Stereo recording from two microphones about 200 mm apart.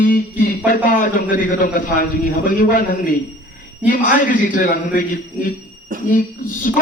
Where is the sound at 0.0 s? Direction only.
45° left (ahead or behind).